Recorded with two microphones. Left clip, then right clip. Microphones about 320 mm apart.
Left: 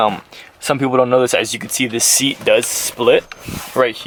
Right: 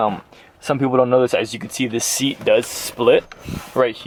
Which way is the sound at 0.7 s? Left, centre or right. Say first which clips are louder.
Left 2 dB; centre.